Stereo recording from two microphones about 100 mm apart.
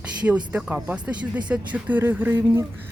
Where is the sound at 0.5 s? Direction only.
20° right (ahead or behind).